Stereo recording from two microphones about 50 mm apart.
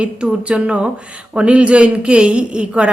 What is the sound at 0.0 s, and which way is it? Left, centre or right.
Speech, right.